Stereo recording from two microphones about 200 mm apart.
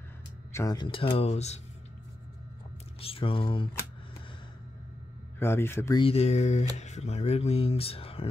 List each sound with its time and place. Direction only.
0.5 s speech: 15° left (ahead or behind); by 1.6 s 35° left (ahead or behind)
3.0 s speech: 25° left (ahead or behind)
5.4 s speech: 10° left (ahead or behind)
6.0 s speech: 30° left (ahead or behind)